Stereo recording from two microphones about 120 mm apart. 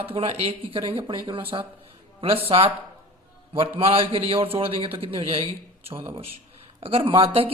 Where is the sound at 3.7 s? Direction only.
50° right (ahead or behind).